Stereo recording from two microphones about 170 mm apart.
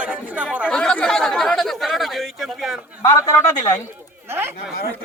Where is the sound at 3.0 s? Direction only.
20° left (ahead or behind).